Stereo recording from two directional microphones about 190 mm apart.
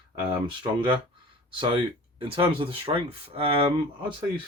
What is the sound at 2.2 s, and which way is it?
Speech, 30° right (ahead or behind).